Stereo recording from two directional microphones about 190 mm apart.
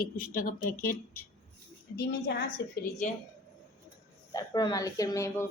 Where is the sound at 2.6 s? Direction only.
70° left (ahead or behind).